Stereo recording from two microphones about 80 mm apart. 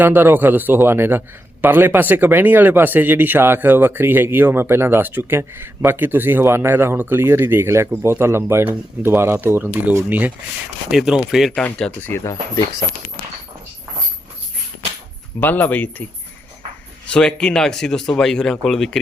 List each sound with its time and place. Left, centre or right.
0.0 s speech: right
10.9 s speech: centre
11.5 s speech: centre
11.9 s speech: left
12.2 s speech: left
15.4 s speech: left
17.1 s speech: centre